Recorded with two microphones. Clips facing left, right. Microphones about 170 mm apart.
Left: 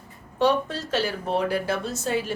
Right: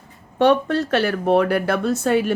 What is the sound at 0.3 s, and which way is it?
Speech, 60° right (ahead or behind).